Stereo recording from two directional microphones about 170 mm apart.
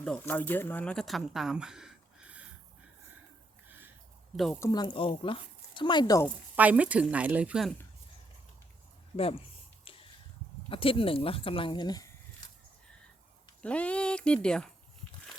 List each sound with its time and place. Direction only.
0.0 s speech: 10° left (ahead or behind); by 2.5 s 5° right (ahead or behind)
3.7 s a sound: 10° right (ahead or behind)
4.6 s speech: 25° left (ahead or behind)
6.6 s speech: 10° right (ahead or behind)
10.7 s speech: 30° left (ahead or behind)
13.6 s speech: 5° left (ahead or behind)